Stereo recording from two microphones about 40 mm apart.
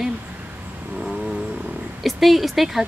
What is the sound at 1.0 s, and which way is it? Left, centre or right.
Roaring cats, centre.